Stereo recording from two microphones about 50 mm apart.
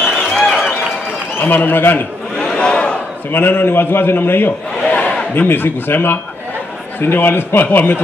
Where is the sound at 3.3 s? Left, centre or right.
Left.